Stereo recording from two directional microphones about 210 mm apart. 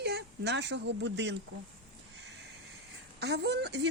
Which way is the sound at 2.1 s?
55° right (ahead or behind).